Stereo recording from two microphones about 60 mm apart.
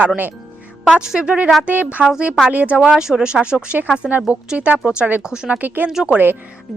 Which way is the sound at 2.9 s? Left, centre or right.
Centre.